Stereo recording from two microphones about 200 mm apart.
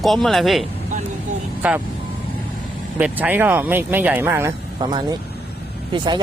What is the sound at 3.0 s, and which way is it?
Speech, 10° right (ahead or behind).